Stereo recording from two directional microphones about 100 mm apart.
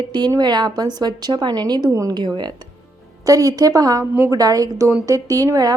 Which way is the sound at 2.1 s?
45° right (ahead or behind).